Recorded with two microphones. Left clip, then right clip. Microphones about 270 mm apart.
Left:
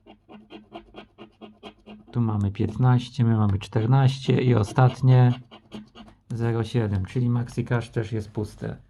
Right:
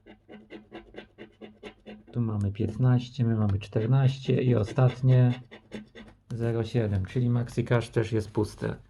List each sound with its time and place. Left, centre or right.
2.0 s speech: left
6.3 s speech: centre